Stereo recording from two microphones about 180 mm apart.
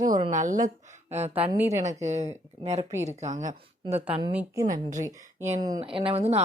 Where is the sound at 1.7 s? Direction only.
40° right (ahead or behind).